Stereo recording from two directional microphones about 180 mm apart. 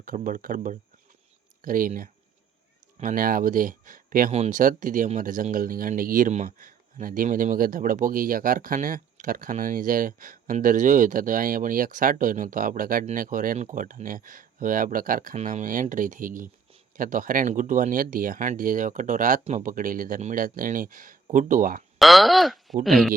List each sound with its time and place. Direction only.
0.0 s speech: 50° right (ahead or behind)
4.3 s speech: 40° right (ahead or behind)
21.9 s speech: centre (ahead or behind)